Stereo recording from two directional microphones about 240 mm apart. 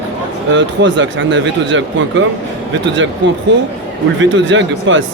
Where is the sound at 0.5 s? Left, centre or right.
Right.